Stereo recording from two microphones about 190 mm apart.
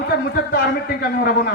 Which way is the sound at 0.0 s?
55° left (ahead or behind).